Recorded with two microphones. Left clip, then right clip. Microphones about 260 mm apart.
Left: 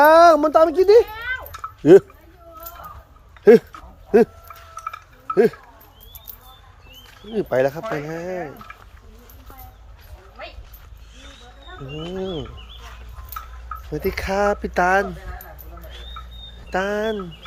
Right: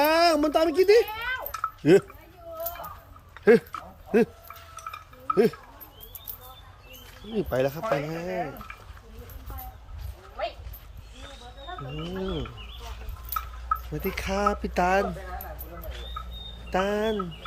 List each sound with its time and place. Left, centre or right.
0.0 s a woman's voice: centre
1.0 s a sound: right
1.8 s speech: left
3.4 s speech: left
4.1 s chink: centre
7.3 s speech: centre
8.7 s a sound: centre
11.9 s speech: centre
13.9 s speech: centre
16.6 s speech: centre